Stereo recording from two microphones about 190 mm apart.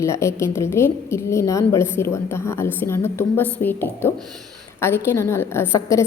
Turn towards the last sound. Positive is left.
turn(degrees=15)  # may be behind; listen again after turning